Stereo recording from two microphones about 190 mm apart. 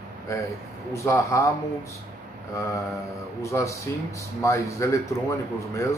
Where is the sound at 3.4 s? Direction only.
15° left (ahead or behind).